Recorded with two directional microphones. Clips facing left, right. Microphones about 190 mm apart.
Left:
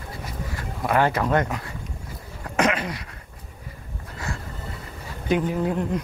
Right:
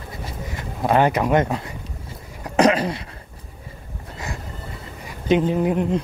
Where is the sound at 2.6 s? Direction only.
35° right (ahead or behind).